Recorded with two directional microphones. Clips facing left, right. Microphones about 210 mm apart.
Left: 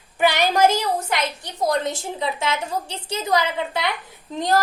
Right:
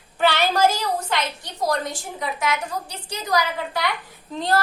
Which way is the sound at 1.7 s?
25° left (ahead or behind).